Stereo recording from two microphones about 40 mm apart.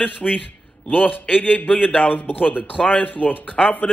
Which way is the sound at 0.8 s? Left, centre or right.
Left.